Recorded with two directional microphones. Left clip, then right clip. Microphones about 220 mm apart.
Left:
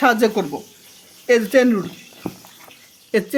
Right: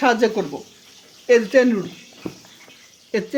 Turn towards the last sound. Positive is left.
turn(degrees=20)  # may be behind; listen again after turning